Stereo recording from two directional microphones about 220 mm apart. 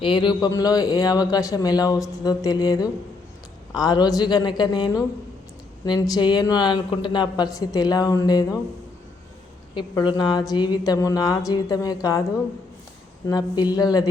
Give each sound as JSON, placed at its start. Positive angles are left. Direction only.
{"t": 0.0, "sound": "speech", "side_deg": 20}
{"t": 9.7, "sound": "speech", "side_deg": 20}
{"t": 13.2, "sound": "speech", "side_deg": 15}